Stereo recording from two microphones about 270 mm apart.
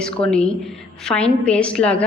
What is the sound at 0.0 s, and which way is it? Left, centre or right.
A woman's voice, centre.